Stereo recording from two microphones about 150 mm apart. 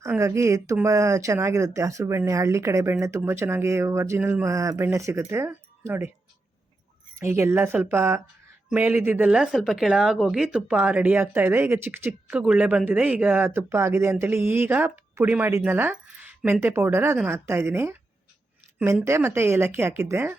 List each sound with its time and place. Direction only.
0.0 s speech: 20° right (ahead or behind)
7.2 s speech: 15° right (ahead or behind)